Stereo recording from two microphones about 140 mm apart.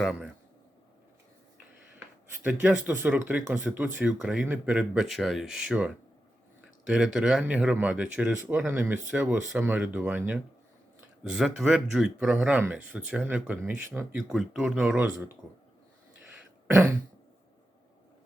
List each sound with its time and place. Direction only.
0.0 s speech: centre (ahead or behind)
2.4 s speech: 10° right (ahead or behind)